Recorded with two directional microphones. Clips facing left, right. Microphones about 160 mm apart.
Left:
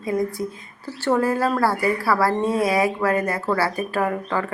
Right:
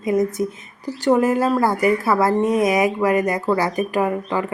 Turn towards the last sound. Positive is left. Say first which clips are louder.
# right 2 dB
turn(degrees=-15)  # may be behind; listen again after turning